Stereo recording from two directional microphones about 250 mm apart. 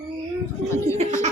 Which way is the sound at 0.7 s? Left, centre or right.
Centre.